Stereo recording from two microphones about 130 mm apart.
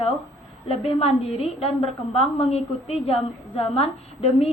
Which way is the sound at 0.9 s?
50° left (ahead or behind).